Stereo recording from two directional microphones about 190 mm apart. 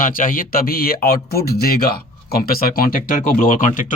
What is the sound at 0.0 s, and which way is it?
Speech, 45° left (ahead or behind).